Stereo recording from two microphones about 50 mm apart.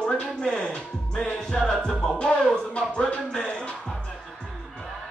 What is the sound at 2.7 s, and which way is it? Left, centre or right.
Speech, left.